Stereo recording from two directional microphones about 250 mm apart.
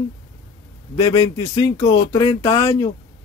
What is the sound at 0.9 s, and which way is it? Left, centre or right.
Speech, centre.